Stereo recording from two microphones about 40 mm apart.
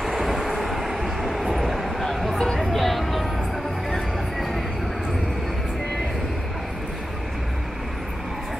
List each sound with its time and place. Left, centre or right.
0.0 s vehicle: centre
2.1 s a sound: centre
3.9 s music: centre